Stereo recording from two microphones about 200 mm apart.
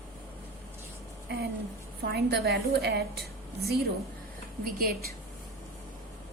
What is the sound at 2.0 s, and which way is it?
A woman's voice, 55° right (ahead or behind).